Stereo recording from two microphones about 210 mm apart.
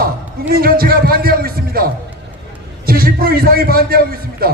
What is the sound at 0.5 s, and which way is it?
A man's voice, 45° right (ahead or behind).